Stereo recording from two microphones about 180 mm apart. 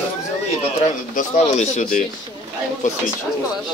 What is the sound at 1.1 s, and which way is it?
Speech, 40° left (ahead or behind).